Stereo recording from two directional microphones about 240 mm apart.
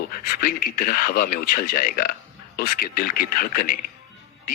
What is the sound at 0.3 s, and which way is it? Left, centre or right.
Speech, left.